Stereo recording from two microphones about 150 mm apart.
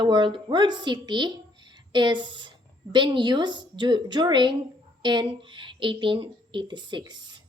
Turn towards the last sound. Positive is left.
turn(degrees=-30)  # may be behind; listen again after turning